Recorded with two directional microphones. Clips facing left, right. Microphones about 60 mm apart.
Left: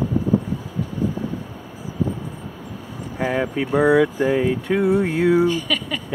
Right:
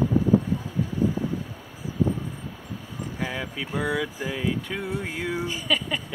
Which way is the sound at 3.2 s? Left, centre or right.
Left.